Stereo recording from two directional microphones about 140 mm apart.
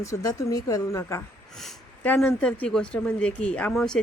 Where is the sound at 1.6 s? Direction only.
5° left (ahead or behind).